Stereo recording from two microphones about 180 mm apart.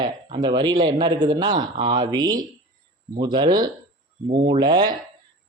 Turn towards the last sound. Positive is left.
turn(degrees=-25)  # may be behind; listen again after turning